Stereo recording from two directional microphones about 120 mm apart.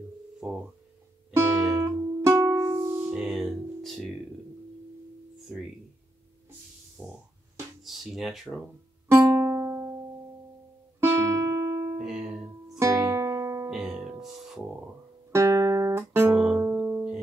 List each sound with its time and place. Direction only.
0.4 s busy signal: 5° right (ahead or behind)
1.3 s music: 25° right (ahead or behind)
3.2 s music: centre (ahead or behind)
5.5 s tuning fork: 10° right (ahead or behind)
7.0 s music: 10° right (ahead or behind)
7.8 s a sound: centre (ahead or behind)
9.1 s music: 25° right (ahead or behind)
11.0 s music: 25° right (ahead or behind)
12.0 s music: 5° right (ahead or behind)
12.6 s music: 25° right (ahead or behind)
13.7 s music: 5° right (ahead or behind)
15.3 s music: 25° right (ahead or behind); by 17.2 s 10° right (ahead or behind)